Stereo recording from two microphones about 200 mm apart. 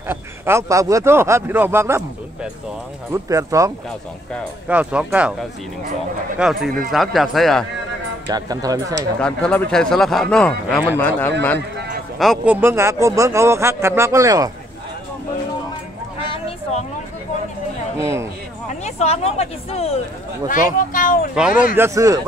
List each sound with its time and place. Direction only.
0.1 s speech: 15° right (ahead or behind)
6.3 s speech: 5° right (ahead or behind)
8.3 s speech: 20° right (ahead or behind)
9.2 s speech: 5° left (ahead or behind)
12.2 s speech: 5° right (ahead or behind)
16.3 s a sound: 30° left (ahead or behind)
17.9 s speech: 15° right (ahead or behind)
18.7 s speech: 35° left (ahead or behind)
20.4 s speech: 40° left (ahead or behind)
21.4 s speech: 5° right (ahead or behind)